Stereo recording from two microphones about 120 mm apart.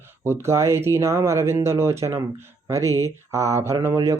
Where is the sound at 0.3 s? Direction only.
20° right (ahead or behind).